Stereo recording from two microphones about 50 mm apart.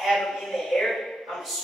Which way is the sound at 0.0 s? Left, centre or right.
Centre.